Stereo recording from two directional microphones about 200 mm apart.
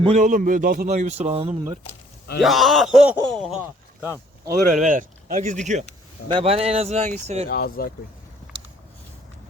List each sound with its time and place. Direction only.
0.0 s a man's voice: 35° right (ahead or behind)
2.4 s speech: centre (ahead or behind)
4.4 s a man's voice: 40° right (ahead or behind)
7.4 s speech: 50° left (ahead or behind)
8.5 s a sound: 25° right (ahead or behind)